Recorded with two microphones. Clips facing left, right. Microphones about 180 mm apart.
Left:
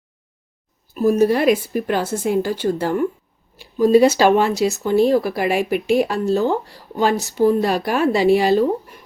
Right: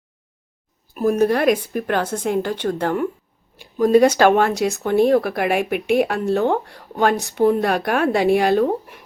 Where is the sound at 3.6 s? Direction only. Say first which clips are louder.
Left 1 dB; 50° right (ahead or behind).